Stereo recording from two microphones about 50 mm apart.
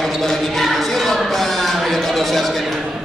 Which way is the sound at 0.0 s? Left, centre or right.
Centre.